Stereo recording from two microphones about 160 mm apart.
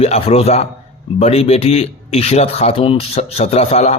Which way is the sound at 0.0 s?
40° left (ahead or behind).